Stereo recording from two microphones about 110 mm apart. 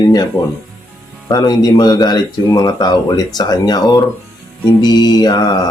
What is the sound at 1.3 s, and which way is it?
Speech, 35° left (ahead or behind).